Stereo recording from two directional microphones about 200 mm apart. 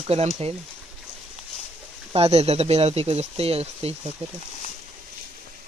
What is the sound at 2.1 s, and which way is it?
Speech, 30° right (ahead or behind).